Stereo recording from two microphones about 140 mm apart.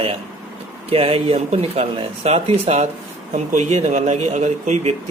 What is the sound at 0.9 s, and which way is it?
Speech, 45° right (ahead or behind).